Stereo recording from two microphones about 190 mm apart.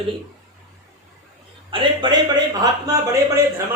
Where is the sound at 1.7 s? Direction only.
25° right (ahead or behind).